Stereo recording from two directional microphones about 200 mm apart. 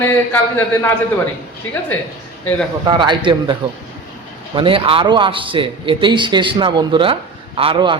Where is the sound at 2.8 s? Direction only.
20° right (ahead or behind).